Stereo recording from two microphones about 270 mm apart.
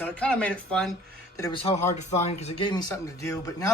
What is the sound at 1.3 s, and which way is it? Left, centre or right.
A man's voice, centre.